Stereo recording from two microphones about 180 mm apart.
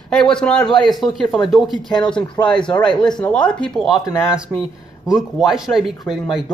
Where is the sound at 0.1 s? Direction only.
5° left (ahead or behind).